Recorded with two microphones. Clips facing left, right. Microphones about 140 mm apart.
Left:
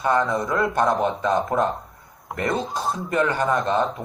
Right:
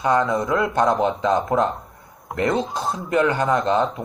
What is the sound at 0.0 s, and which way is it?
Speech, 20° right (ahead or behind).